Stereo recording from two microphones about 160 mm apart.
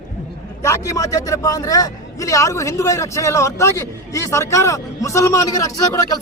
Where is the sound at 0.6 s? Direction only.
20° left (ahead or behind).